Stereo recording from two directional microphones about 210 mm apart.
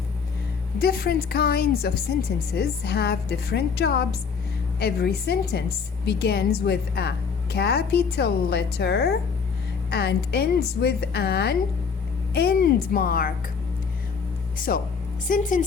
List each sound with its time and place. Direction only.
0.8 s a woman's voice: 45° left (ahead or behind)
14.7 s a woman's voice: 45° left (ahead or behind)